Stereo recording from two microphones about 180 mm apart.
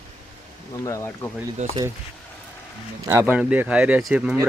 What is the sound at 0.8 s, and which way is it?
Speech, 15° left (ahead or behind).